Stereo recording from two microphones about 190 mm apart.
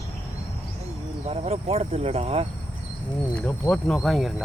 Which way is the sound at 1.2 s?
30° right (ahead or behind).